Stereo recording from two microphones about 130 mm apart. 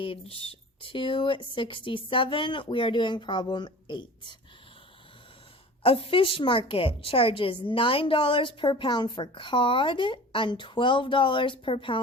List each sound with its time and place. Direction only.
0.0 s a woman's voice: 45° left (ahead or behind)
5.8 s a woman's voice: 45° left (ahead or behind)